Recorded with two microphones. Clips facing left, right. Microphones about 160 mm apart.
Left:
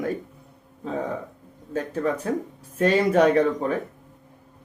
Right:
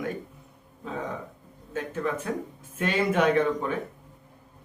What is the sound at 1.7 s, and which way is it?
A man's voice, 35° left (ahead or behind).